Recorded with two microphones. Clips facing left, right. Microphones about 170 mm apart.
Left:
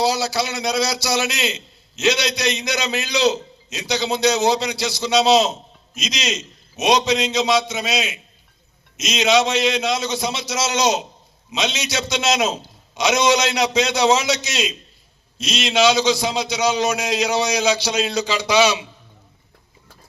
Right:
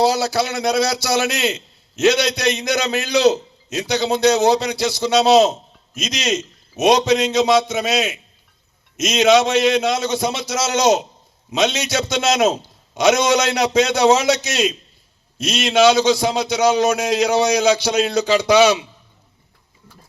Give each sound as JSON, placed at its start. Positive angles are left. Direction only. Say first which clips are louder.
{"t": 0.0, "sound": "a man's voice", "louder": "right 3 dB", "side_deg": -55}